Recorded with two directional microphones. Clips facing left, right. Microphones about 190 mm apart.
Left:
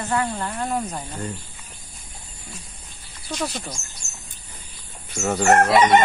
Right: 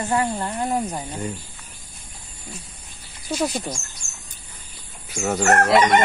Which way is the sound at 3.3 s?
5° right (ahead or behind).